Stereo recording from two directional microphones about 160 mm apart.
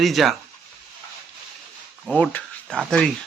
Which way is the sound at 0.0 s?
Centre (ahead or behind).